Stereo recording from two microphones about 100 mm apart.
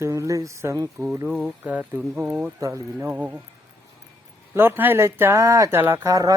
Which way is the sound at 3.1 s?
15° right (ahead or behind).